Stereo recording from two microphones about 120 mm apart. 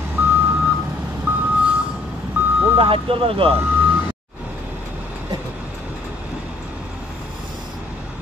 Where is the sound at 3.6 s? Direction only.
15° right (ahead or behind).